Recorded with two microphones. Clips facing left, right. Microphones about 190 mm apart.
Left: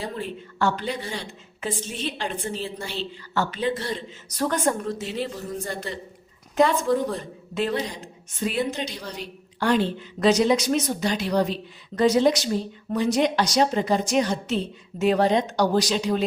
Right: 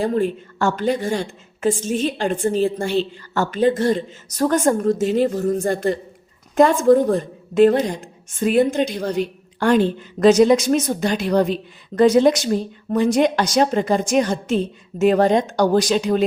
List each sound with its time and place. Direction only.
0.0 s a woman's voice: 45° right (ahead or behind)